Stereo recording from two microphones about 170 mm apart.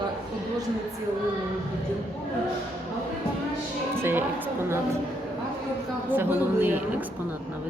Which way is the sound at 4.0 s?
10° right (ahead or behind).